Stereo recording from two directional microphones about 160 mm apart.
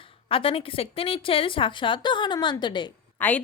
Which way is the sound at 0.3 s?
35° left (ahead or behind).